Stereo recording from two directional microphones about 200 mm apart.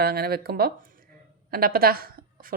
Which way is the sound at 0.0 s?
50° right (ahead or behind).